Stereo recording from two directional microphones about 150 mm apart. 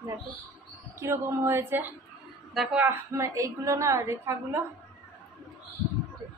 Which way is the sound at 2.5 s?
Centre (ahead or behind).